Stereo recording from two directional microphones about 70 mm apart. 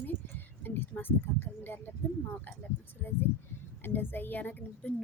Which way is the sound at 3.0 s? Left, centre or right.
Left.